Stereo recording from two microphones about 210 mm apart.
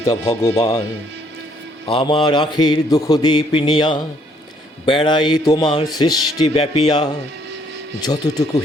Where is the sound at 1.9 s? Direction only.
25° left (ahead or behind).